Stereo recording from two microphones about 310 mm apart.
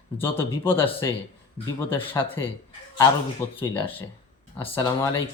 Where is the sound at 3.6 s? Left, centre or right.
Centre.